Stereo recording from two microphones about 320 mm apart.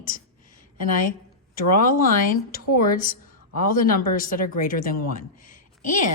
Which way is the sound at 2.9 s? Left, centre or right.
Left.